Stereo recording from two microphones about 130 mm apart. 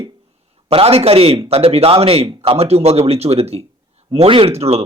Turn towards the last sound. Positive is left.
turn(degrees=-55)  # may be behind; listen again after turning